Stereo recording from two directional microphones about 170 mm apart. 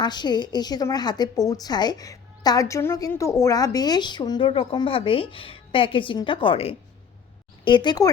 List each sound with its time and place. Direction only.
0.0 s a woman's voice: 25° left (ahead or behind)